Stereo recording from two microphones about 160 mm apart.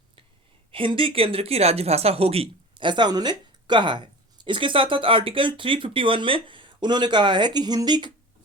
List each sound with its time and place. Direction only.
0.7 s speech: 35° right (ahead or behind)